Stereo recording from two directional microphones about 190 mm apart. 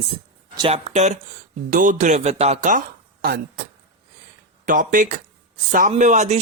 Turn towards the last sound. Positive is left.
turn(degrees=-35)  # may be behind; listen again after turning